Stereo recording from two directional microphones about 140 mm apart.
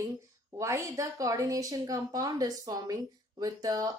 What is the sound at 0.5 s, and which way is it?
Speech, 20° right (ahead or behind).